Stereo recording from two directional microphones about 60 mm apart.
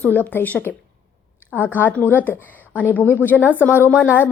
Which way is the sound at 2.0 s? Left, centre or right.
Left.